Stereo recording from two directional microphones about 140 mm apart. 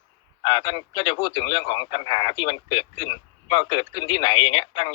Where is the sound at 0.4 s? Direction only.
35° left (ahead or behind).